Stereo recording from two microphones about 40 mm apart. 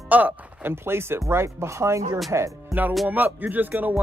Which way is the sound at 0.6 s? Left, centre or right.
Right.